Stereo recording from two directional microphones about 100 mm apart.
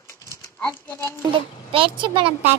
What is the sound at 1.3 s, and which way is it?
A child's voice, 60° right (ahead or behind).